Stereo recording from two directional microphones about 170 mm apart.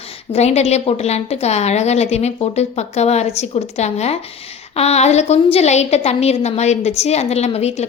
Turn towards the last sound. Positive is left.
turn(degrees=40)  # may be behind; listen again after turning